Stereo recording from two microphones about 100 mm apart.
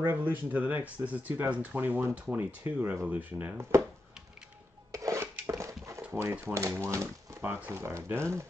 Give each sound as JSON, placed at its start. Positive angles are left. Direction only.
{"t": 0.0, "sound": "speech", "side_deg": -20}
{"t": 4.9, "sound": "dishes", "side_deg": -30}
{"t": 6.1, "sound": "speech", "side_deg": -25}
{"t": 7.4, "sound": "speech", "side_deg": -20}